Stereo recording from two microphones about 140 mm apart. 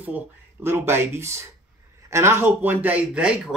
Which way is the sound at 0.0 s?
15° right (ahead or behind).